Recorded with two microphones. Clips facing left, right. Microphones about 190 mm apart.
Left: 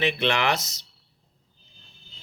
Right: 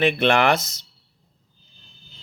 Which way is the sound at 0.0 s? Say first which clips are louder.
Right 6 dB; 50° right (ahead or behind).